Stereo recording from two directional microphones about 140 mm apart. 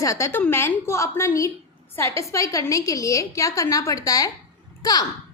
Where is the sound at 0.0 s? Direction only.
20° left (ahead or behind).